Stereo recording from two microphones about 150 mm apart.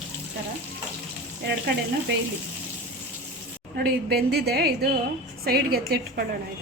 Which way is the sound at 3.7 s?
90° right.